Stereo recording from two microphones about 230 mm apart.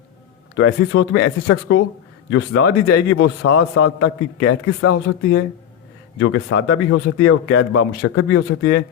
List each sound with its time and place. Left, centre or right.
0.5 s a man's voice: left
6.1 s a man's voice: left